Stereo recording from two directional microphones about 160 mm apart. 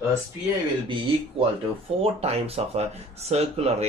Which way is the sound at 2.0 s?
40° right (ahead or behind).